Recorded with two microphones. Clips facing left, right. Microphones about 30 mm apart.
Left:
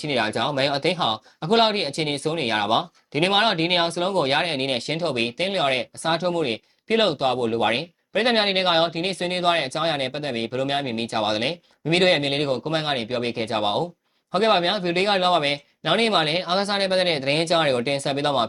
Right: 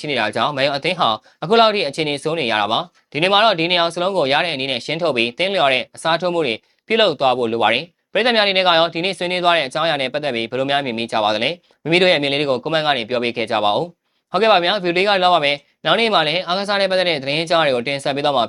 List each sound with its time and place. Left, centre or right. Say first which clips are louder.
0.1 s speech: right 4 dB; right